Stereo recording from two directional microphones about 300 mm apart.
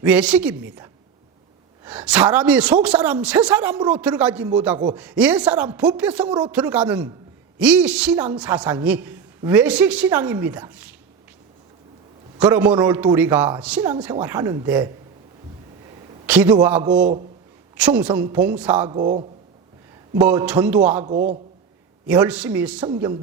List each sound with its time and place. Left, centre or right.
0.0 s a woman's voice: centre
12.4 s a woman's voice: centre
16.2 s a woman's voice: centre
16.9 s a man's voice: right
17.7 s a woman's voice: centre
21.0 s a man's voice: right
22.0 s a woman's voice: centre